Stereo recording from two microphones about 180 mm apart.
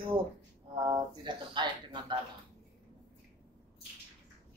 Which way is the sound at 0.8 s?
25° right (ahead or behind).